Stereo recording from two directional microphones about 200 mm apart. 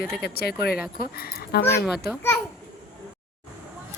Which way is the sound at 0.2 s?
50° left (ahead or behind).